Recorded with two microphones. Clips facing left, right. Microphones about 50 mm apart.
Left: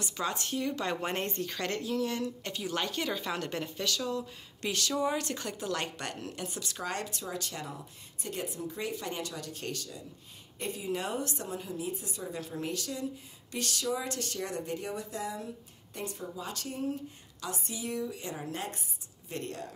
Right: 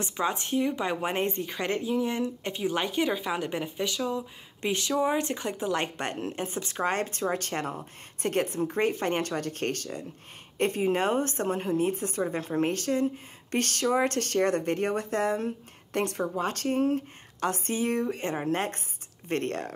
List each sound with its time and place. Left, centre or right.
0.0 s a woman's voice: right